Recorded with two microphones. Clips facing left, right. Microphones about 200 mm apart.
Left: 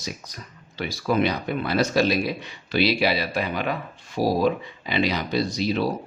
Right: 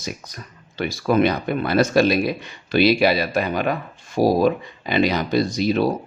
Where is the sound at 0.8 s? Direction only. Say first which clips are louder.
Right 4 dB; 55° right (ahead or behind).